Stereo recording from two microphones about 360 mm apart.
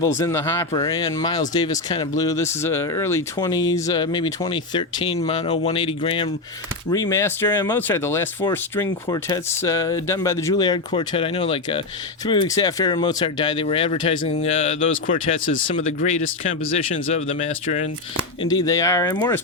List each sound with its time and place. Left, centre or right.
0.0 s speech: centre
14.8 s speech: left
15.7 s speech: left
17.4 s speech: centre